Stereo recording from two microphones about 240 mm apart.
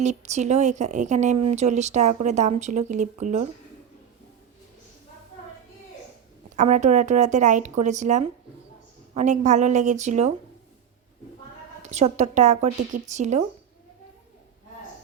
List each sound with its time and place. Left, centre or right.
0.0 s speech: right
6.6 s speech: right
11.8 s speech: right